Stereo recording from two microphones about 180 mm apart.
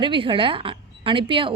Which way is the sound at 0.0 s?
30° right (ahead or behind).